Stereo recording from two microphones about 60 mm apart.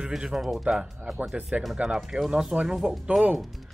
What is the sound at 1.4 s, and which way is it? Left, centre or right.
Speech, right.